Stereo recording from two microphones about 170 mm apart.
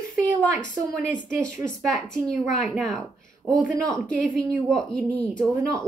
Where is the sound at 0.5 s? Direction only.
50° left (ahead or behind).